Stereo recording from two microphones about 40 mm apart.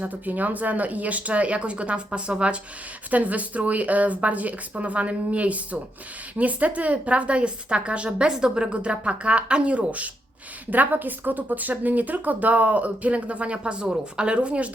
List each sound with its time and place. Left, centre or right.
0.0 s speech: right
3.1 s speech: right
8.3 s speech: centre; by 10.1 s right
10.7 s speech: right